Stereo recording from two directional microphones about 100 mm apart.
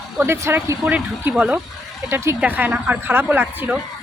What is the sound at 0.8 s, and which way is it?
Speech, 15° right (ahead or behind).